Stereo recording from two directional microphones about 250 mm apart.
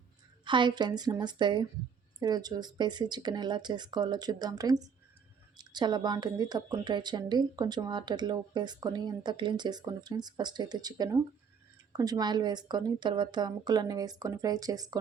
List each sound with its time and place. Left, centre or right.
0.4 s speech: centre